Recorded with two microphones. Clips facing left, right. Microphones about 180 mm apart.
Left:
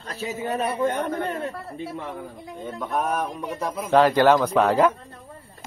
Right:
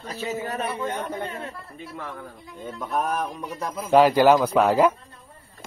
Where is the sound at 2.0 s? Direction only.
20° left (ahead or behind).